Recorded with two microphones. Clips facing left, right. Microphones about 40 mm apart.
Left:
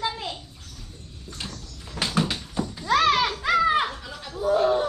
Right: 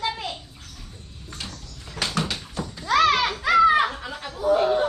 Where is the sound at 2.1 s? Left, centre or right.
Centre.